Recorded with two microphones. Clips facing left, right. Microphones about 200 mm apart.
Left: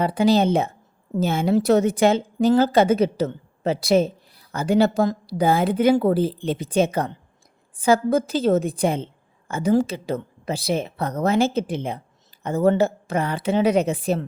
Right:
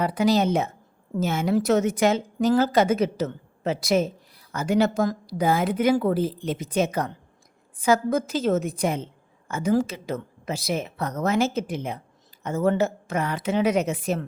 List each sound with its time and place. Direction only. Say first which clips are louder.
0.0 s a woman's voice: left 3 dB; 30° left (ahead or behind)